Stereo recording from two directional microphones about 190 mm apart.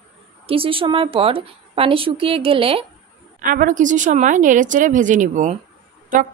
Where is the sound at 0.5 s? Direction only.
30° right (ahead or behind).